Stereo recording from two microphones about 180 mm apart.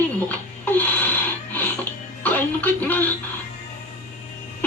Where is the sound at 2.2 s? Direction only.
10° left (ahead or behind).